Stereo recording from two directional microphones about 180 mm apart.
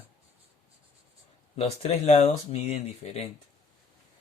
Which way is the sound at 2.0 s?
35° left (ahead or behind).